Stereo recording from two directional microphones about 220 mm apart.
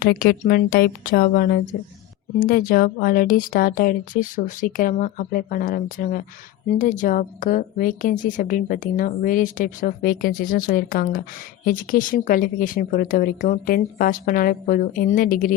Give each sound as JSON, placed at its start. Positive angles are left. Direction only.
{"t": 0.0, "sound": "speech", "side_deg": 40}